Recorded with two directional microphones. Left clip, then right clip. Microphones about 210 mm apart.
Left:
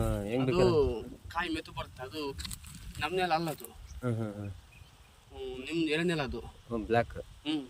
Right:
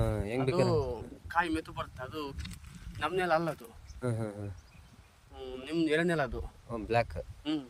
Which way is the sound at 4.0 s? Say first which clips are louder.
Even; 30° right (ahead or behind).